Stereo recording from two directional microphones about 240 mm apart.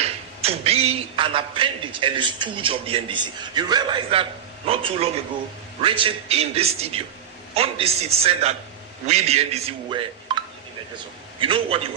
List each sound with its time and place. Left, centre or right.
0.4 s a man's voice: right